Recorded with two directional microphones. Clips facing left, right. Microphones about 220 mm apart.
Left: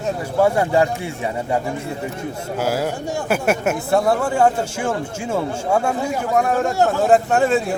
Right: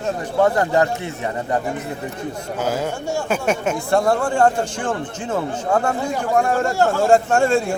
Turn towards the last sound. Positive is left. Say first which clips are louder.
# even
turn(degrees=0)  # may be behind; listen again after turning